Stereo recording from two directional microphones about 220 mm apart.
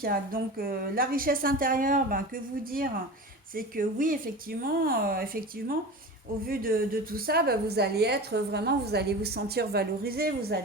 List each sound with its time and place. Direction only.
0.0 s a woman's voice: 40° right (ahead or behind)